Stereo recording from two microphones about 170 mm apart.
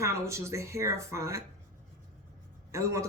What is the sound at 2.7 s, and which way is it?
Speech, 15° right (ahead or behind).